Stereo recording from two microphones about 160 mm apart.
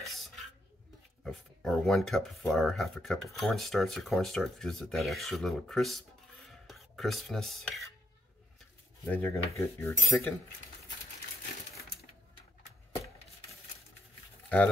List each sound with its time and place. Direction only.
0.0 s a sound: centre (ahead or behind)
1.2 s speech: 5° left (ahead or behind)
9.0 s cutlery: 15° left (ahead or behind)